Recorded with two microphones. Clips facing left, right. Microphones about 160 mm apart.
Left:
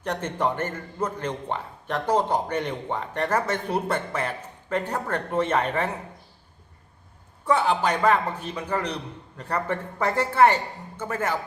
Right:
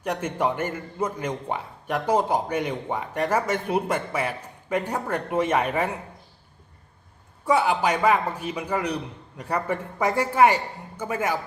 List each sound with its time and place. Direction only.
0.0 s a man's voice: 10° right (ahead or behind)
7.4 s a man's voice: 10° right (ahead or behind)